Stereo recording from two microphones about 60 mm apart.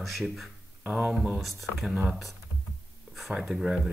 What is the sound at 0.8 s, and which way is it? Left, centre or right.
Speech, right.